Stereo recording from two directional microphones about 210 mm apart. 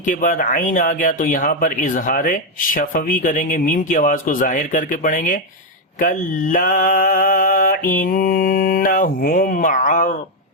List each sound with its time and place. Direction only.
0.0 s speech: 40° left (ahead or behind)